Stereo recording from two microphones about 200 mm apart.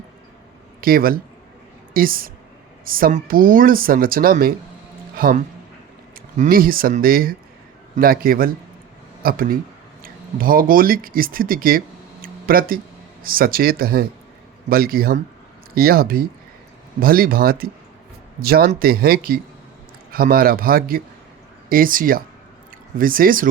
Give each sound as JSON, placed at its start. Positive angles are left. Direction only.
{"t": 0.8, "sound": "a woman's voice", "side_deg": -45}
{"t": 12.2, "sound": "a sound", "side_deg": -45}
{"t": 13.2, "sound": "speech", "side_deg": -45}